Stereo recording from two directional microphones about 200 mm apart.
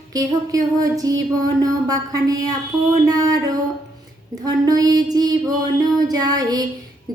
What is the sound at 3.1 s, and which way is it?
A woman's voice, 20° right (ahead or behind).